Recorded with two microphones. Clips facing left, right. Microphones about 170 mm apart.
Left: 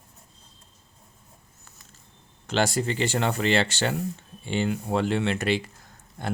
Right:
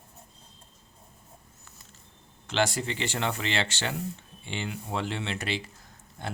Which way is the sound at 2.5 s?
40° left (ahead or behind).